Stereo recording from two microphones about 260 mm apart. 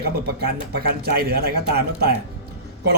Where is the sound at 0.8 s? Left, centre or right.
Right.